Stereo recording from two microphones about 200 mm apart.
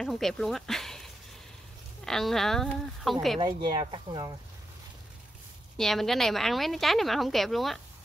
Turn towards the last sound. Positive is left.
turn(degrees=0)  # may be behind; listen again after turning